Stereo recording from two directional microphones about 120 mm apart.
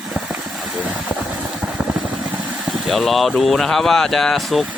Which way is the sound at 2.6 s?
Centre (ahead or behind).